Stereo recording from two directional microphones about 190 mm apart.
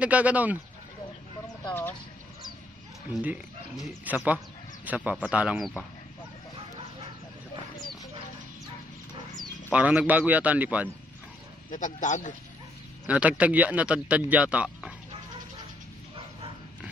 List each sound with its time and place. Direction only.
0.0 s speech: 5° right (ahead or behind)
1.7 s speech: 10° left (ahead or behind)
4.1 s a man's voice: 10° right (ahead or behind)
9.4 s speech: 5° right (ahead or behind)
11.7 s speech: 40° left (ahead or behind)
13.0 s speech: 5° right (ahead or behind)